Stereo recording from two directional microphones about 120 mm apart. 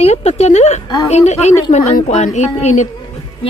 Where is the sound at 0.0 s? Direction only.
65° left (ahead or behind); by 2.9 s 80° left.